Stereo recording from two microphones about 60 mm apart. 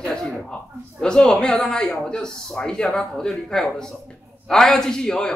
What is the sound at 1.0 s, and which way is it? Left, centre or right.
A man's voice, centre.